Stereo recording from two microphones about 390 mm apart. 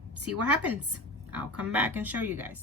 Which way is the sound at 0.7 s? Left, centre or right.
Right.